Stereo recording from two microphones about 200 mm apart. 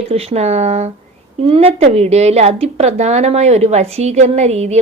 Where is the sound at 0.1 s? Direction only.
30° right (ahead or behind).